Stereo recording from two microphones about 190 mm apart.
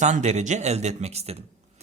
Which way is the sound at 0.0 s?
40° right (ahead or behind).